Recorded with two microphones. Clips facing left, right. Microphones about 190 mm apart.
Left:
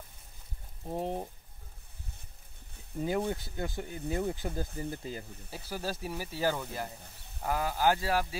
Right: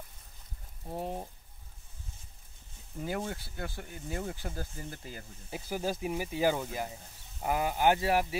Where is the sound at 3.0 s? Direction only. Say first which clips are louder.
Left 4 dB; 15° left (ahead or behind).